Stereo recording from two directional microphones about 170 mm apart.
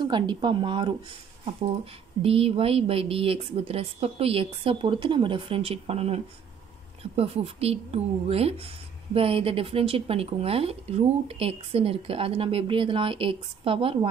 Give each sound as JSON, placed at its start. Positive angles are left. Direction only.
{"t": 0.0, "sound": "speech", "side_deg": -25}
{"t": 2.2, "sound": "speech", "side_deg": -35}